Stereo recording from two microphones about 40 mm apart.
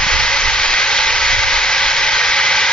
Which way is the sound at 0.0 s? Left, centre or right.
Centre.